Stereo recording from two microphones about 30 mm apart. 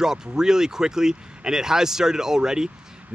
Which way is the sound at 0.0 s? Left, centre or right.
Right.